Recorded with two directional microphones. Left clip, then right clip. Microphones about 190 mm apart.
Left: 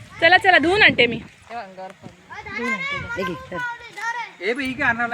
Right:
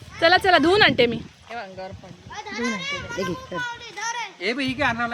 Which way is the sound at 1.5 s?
Centre (ahead or behind).